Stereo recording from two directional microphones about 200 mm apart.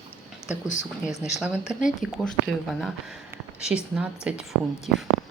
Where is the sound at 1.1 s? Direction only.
35° left (ahead or behind).